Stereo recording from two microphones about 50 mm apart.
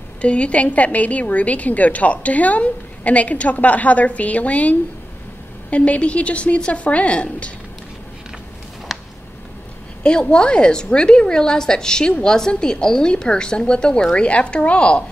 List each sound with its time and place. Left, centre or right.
0.2 s a woman's voice: left
8.9 s a sound: centre
10.0 s a woman's voice: centre